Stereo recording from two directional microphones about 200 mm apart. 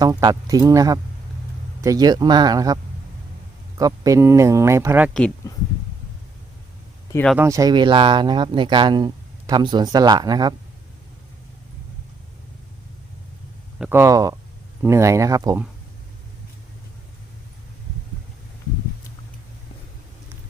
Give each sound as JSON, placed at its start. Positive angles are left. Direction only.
{"t": 0.0, "sound": "speech", "side_deg": -20}
{"t": 3.8, "sound": "speech", "side_deg": -15}
{"t": 5.4, "sound": "speech", "side_deg": 15}
{"t": 7.3, "sound": "speech", "side_deg": -15}
{"t": 13.7, "sound": "speech", "side_deg": -5}